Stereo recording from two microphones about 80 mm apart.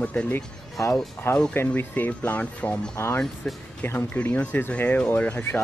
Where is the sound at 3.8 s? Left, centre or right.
Left.